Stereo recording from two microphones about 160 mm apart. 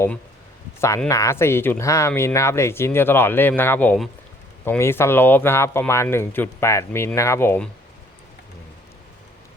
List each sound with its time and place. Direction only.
0.8 s speech: 20° left (ahead or behind)